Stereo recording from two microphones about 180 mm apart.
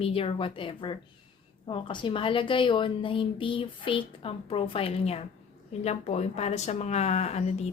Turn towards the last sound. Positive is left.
turn(degrees=35)  # may be behind; listen again after turning